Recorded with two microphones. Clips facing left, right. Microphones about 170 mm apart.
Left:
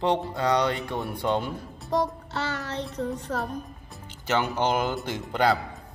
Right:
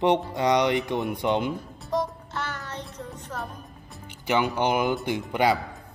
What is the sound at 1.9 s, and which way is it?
Child singing, 70° left (ahead or behind).